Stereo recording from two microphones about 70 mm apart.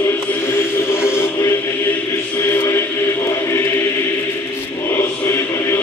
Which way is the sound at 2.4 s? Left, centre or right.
Left.